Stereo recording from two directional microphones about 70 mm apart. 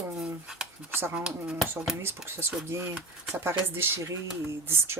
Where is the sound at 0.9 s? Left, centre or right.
Right.